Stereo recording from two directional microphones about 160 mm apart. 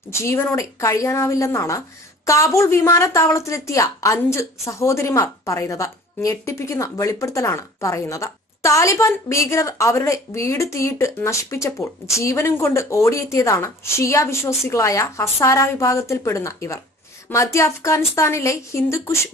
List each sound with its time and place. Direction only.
0.1 s a woman's voice: 15° left (ahead or behind)